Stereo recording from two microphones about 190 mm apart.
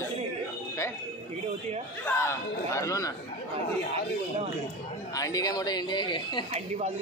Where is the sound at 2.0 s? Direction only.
15° left (ahead or behind).